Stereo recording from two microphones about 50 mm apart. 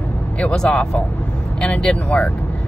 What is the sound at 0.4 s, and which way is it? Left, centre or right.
Speech, centre.